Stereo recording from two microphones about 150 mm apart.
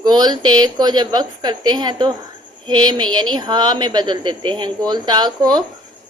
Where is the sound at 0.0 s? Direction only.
30° right (ahead or behind).